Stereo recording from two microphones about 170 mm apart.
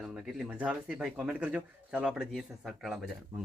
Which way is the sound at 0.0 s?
5° right (ahead or behind).